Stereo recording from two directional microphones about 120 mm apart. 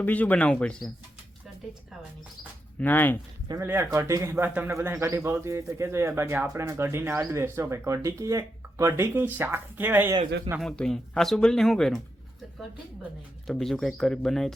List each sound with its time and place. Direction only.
0.0 s speech: 15° left (ahead or behind)
2.7 s speech: 15° left (ahead or behind)
3.5 s speech: 20° right (ahead or behind)
10.6 s speech: 5° left (ahead or behind)
13.5 s speech: 5° left (ahead or behind)